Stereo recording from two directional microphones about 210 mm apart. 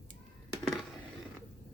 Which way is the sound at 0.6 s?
Centre (ahead or behind).